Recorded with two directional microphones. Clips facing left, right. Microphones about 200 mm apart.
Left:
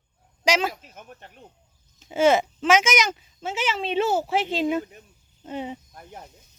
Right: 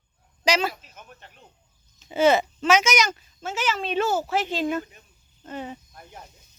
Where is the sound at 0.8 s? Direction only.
50° left (ahead or behind).